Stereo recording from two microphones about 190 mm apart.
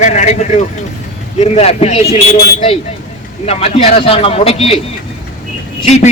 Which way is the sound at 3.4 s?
30° left (ahead or behind).